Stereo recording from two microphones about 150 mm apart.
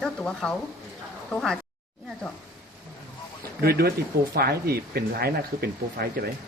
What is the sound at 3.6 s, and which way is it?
Speech, 90° right.